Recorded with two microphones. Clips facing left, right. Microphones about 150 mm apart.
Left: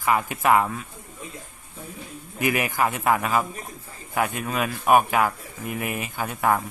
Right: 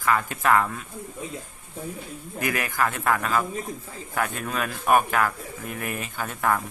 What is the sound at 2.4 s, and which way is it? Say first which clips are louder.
Speech: left 3 dB; 15° left (ahead or behind).